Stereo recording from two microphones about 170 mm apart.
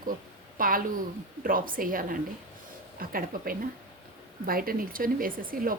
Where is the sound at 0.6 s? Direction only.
55° right (ahead or behind).